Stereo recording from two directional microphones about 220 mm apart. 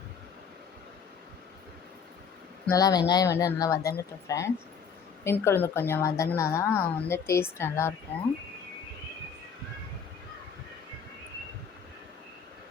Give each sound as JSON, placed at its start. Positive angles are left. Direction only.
{"t": 2.6, "sound": "a woman's voice", "side_deg": 15}